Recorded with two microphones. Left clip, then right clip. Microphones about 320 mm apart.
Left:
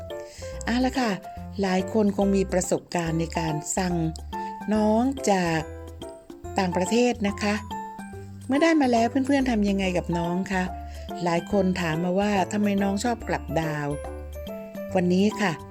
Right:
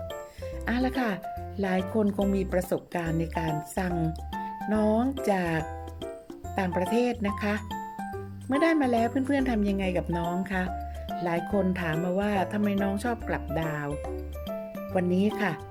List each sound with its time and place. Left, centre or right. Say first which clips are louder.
0.4 s speech: left 3 dB; centre
14.9 s speech: left 3 dB; centre